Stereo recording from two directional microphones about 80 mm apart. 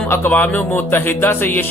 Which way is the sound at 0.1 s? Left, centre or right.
Left.